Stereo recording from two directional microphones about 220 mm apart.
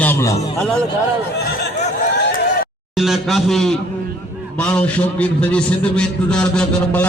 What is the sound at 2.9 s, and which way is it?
A man's voice, centre (ahead or behind).